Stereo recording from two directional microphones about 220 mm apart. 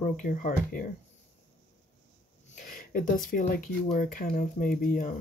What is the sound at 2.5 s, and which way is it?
Speech, 40° left (ahead or behind).